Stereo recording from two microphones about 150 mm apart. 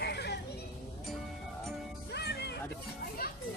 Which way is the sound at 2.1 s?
90° left.